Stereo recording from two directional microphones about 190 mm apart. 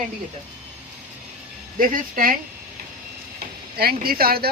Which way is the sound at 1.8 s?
45° right (ahead or behind).